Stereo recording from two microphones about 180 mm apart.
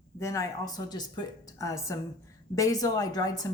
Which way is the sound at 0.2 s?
15° left (ahead or behind).